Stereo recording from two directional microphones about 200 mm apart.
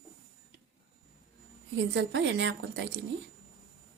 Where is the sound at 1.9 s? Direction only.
65° right (ahead or behind).